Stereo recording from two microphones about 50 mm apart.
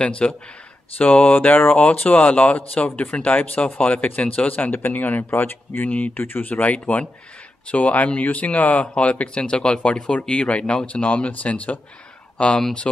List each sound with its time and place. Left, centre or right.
0.0 s speech: left
0.9 s speech: left
5.9 s speech: left
6.1 s speech: left